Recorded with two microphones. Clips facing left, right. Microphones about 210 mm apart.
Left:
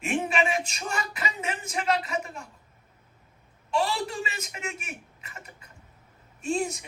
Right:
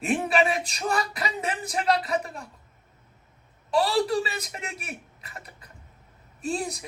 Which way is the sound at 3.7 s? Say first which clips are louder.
Right 5 dB; 35° right (ahead or behind).